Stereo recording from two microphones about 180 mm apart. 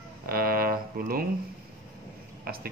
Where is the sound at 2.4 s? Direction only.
55° right (ahead or behind).